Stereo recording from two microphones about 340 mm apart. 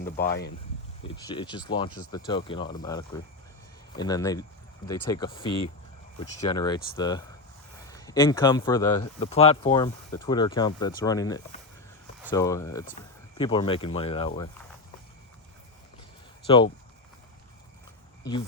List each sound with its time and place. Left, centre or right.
0.3 s speech: left
1.0 s speech: centre
12.8 s speech: centre